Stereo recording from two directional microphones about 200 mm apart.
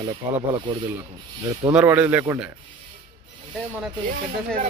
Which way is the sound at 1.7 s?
5° right (ahead or behind).